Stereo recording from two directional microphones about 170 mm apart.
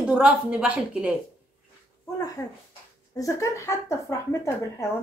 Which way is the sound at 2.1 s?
20° left (ahead or behind).